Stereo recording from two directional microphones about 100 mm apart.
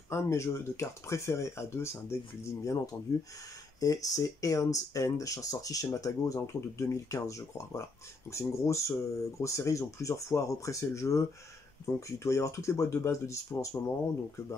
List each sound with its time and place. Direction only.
0.1 s speech: 30° left (ahead or behind)